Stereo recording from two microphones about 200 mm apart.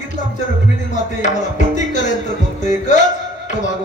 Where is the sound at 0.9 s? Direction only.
35° left (ahead or behind).